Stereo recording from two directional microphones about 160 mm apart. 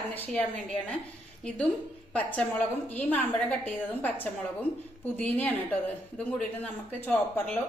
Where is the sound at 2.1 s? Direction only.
10° left (ahead or behind).